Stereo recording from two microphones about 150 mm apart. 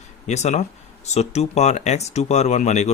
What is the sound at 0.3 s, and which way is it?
Speech, 50° left (ahead or behind).